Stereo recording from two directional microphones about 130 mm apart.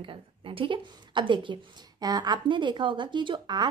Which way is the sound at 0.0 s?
40° right (ahead or behind).